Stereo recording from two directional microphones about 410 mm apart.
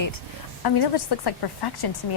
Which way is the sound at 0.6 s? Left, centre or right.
Left.